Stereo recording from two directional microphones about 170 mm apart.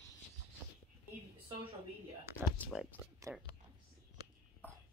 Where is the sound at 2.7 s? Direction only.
5° right (ahead or behind).